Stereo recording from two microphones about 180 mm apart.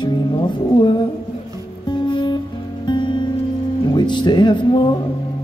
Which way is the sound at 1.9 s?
25° left (ahead or behind).